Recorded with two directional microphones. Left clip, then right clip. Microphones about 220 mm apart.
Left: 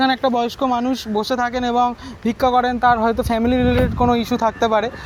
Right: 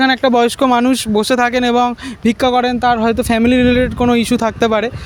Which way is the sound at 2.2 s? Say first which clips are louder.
Right 3 dB; 45° right (ahead or behind).